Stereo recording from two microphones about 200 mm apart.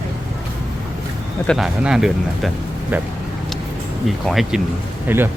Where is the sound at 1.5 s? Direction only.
Centre (ahead or behind).